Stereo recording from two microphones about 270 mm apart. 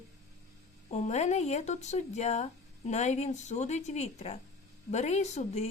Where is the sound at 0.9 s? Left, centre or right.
Left.